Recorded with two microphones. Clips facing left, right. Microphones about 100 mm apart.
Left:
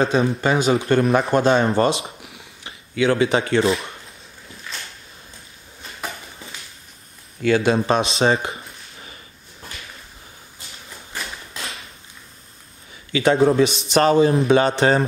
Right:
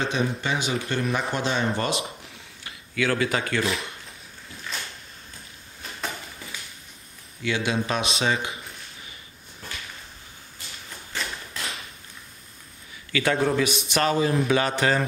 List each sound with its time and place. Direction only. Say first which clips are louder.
0.0 s speech: left 7 dB; 40° left (ahead or behind)
1.8 s speech: left 8 dB; 30° left (ahead or behind)
7.4 s speech: left 8 dB; 45° left (ahead or behind)
13.1 s speech: left 7 dB; 25° left (ahead or behind)